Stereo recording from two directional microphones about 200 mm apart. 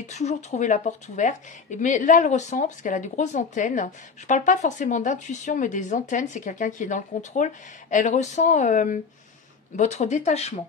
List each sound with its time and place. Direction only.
0.0 s speech: 35° left (ahead or behind)